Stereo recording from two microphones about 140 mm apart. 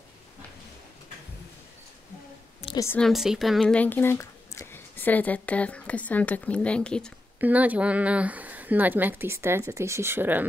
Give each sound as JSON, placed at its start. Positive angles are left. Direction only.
{"t": 2.6, "sound": "a sound", "side_deg": 50}
{"t": 3.0, "sound": "speech", "side_deg": 0}
{"t": 7.3, "sound": "speech", "side_deg": -10}